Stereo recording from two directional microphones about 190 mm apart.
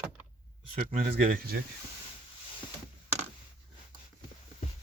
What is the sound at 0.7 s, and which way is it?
Speech, 50° right (ahead or behind).